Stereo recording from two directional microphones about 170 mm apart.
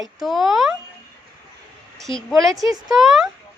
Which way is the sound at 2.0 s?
Centre (ahead or behind).